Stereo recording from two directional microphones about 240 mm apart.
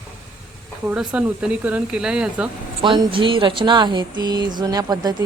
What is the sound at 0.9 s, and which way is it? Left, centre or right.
Speech, centre.